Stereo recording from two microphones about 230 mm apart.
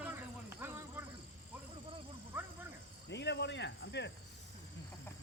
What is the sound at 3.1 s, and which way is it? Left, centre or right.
Speech, left.